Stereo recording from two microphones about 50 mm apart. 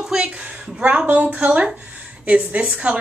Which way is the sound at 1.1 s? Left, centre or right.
Right.